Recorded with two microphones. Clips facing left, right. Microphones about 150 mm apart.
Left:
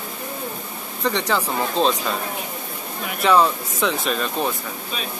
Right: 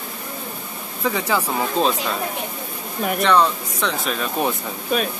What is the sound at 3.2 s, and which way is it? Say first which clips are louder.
Speech: left 1 dB; 5° left (ahead or behind).